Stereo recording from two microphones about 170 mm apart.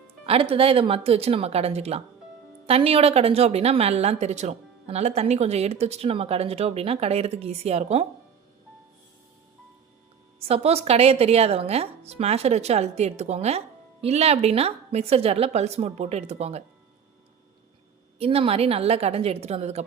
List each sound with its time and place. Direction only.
0.3 s speech: 35° right (ahead or behind)
10.4 s speech: 35° right (ahead or behind)
18.2 s speech: 35° right (ahead or behind)